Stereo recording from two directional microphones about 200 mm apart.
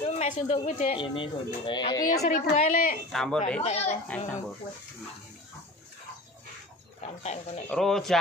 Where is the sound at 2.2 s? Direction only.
45° left (ahead or behind).